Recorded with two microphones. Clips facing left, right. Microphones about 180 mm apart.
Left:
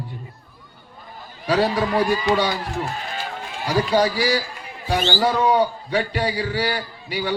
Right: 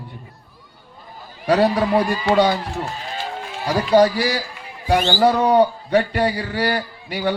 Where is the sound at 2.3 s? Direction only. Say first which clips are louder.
Right 5 dB; 55° right (ahead or behind).